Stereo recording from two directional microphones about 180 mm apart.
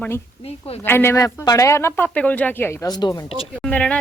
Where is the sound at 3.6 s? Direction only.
5° left (ahead or behind).